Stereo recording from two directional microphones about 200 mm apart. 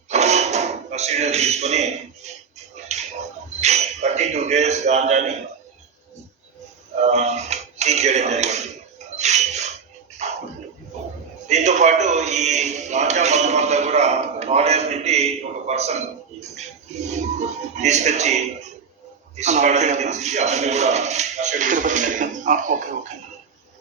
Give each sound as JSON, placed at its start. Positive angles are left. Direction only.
{"t": 0.1, "sound": "a sound", "side_deg": -35}
{"t": 3.6, "sound": "a man's voice", "side_deg": -35}
{"t": 6.9, "sound": "speech", "side_deg": -35}
{"t": 9.1, "sound": "a sound", "side_deg": -35}
{"t": 10.2, "sound": "music", "side_deg": -35}
{"t": 11.4, "sound": "a man's voice", "side_deg": -35}
{"t": 17.7, "sound": "speech", "side_deg": -35}